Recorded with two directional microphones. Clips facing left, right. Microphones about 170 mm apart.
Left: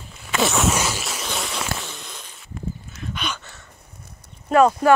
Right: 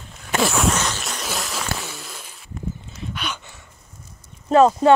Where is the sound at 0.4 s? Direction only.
Centre (ahead or behind).